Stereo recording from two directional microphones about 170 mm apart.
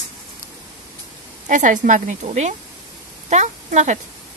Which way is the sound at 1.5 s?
50° right (ahead or behind).